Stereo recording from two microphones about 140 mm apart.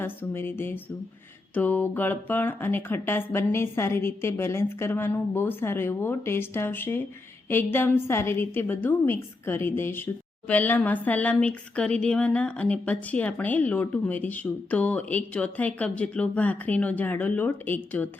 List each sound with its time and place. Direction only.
0.0 s speech: 15° left (ahead or behind)